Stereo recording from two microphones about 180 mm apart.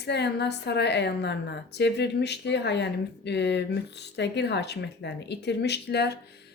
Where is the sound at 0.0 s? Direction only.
70° left (ahead or behind).